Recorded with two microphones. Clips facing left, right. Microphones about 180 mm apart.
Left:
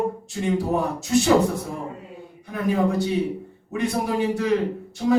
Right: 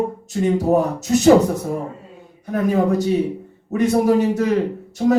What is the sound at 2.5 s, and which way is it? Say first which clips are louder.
Speech: right 4 dB; 40° right (ahead or behind).